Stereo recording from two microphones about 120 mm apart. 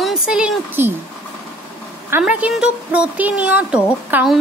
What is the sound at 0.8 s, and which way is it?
Speech, 20° right (ahead or behind).